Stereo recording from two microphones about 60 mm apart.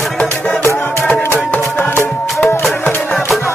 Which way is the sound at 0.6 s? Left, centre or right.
Left.